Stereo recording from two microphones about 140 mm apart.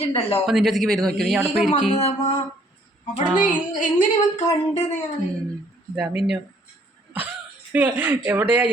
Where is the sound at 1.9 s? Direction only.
50° left (ahead or behind).